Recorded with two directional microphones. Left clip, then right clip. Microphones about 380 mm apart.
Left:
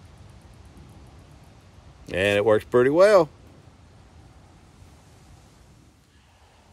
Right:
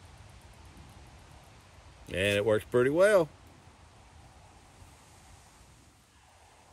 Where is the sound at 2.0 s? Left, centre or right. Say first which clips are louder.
Left 7 dB; centre.